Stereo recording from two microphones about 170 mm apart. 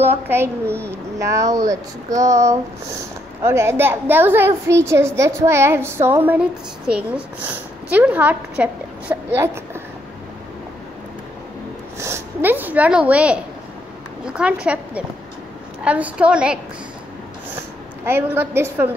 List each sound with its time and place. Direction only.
0.3 s a woman's voice: 15° right (ahead or behind)
12.0 s a woman's voice: 15° right (ahead or behind)
18.0 s a woman's voice: 10° right (ahead or behind)